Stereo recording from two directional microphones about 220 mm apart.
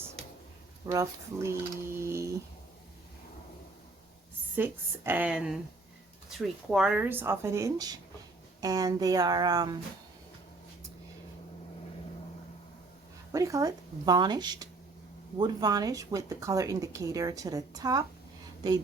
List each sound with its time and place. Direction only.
0.9 s speech: 15° right (ahead or behind)
4.5 s speech: 10° right (ahead or behind)
13.3 s speech: 15° right (ahead or behind)